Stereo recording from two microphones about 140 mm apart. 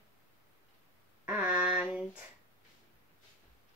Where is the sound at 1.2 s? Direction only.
10° right (ahead or behind).